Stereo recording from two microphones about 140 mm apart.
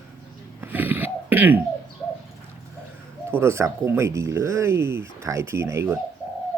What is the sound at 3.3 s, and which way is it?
Speech, 20° right (ahead or behind).